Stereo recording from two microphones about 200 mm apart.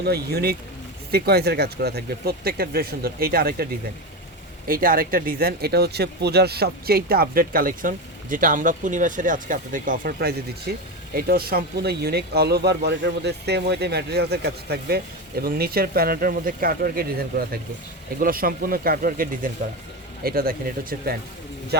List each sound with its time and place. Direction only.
0.0 s speech: 50° right (ahead or behind)
4.7 s speech: 45° right (ahead or behind)